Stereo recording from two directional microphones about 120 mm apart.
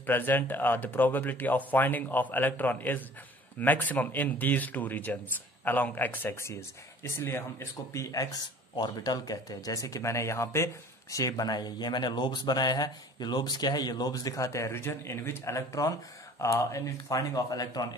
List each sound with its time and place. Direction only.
0.0 s speech: 15° left (ahead or behind); by 17.8 s 30° left (ahead or behind)